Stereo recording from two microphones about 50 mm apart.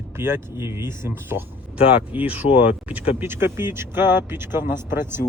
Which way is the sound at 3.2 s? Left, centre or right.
Right.